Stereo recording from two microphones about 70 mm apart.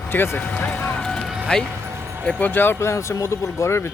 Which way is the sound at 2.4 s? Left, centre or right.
Left.